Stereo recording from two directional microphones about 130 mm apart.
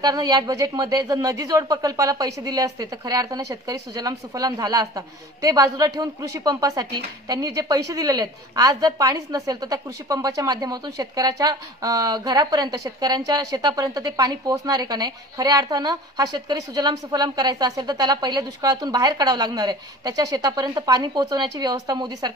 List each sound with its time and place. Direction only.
0.0 s speech: 30° right (ahead or behind)